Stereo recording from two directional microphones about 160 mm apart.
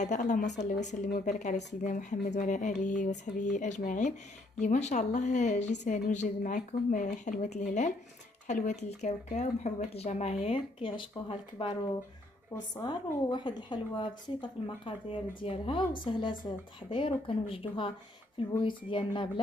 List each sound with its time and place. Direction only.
0.0 s a woman's voice: 50° left (ahead or behind); by 19.4 s 30° left (ahead or behind)